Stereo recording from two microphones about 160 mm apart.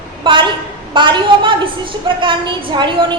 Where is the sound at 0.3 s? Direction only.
30° right (ahead or behind).